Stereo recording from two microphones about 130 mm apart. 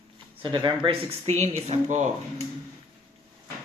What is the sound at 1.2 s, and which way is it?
Speech, 55° right (ahead or behind).